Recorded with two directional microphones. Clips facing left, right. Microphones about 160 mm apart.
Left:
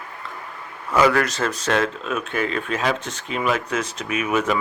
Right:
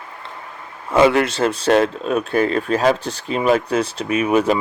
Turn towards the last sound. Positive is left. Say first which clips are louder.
# right 5 dB
turn(degrees=-30)  # may be behind; listen again after turning